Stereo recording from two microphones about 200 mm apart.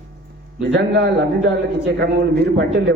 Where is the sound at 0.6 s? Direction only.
65° right (ahead or behind).